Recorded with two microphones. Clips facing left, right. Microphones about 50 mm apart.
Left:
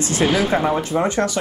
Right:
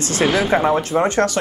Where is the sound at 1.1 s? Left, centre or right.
Right.